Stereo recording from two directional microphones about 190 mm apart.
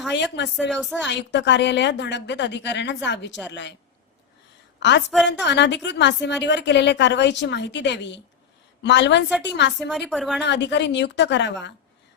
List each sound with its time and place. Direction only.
0.1 s a woman's voice: 65° left (ahead or behind)
0.7 s speech: centre (ahead or behind)
1.0 s a woman's voice: 65° left (ahead or behind)
4.8 s a woman's voice: 65° left (ahead or behind)
10.1 s speech: centre (ahead or behind)
10.4 s a woman's voice: 65° left (ahead or behind)